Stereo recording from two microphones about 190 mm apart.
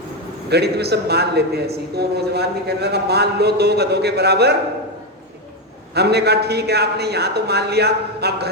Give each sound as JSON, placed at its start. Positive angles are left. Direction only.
{"t": 0.5, "sound": "a man's voice", "side_deg": -60}
{"t": 5.9, "sound": "a man's voice", "side_deg": -60}